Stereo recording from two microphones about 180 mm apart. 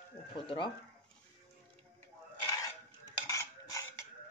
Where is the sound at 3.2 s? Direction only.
15° left (ahead or behind).